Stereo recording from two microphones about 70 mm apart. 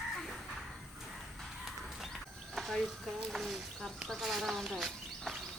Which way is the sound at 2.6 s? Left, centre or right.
Centre.